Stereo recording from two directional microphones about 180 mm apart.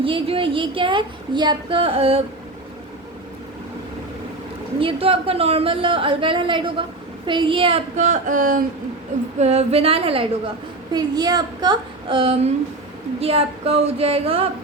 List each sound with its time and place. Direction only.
0.0 s speech: 30° right (ahead or behind)
4.8 s a woman's voice: 30° right (ahead or behind); by 8.6 s 50° right (ahead or behind)
9.4 s a woman's voice: 35° right (ahead or behind)
10.9 s a woman's voice: 20° right (ahead or behind)